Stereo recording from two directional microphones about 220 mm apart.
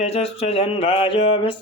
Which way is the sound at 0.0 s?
25° left (ahead or behind).